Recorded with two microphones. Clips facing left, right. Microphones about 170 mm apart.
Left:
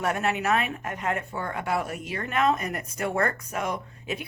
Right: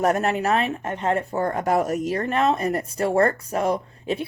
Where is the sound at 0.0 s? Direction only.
40° right (ahead or behind).